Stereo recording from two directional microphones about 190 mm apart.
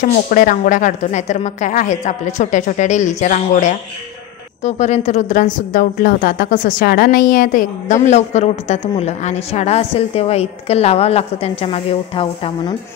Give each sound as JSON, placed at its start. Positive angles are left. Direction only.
{"t": 0.1, "sound": "a woman's voice", "side_deg": 45}